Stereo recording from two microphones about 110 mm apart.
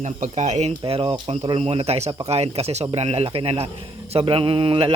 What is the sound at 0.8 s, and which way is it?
A man's voice, 55° right (ahead or behind).